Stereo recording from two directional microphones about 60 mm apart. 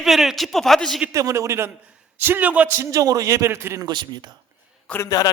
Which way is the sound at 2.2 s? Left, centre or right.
Right.